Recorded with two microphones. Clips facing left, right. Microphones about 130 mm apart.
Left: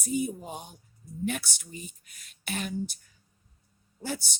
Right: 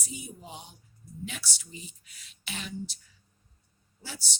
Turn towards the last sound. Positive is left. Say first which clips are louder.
# left 10 dB
turn(degrees=50)  # may be behind; listen again after turning